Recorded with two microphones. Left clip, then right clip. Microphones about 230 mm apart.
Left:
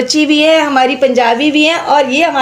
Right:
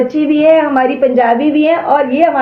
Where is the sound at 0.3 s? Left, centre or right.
Left.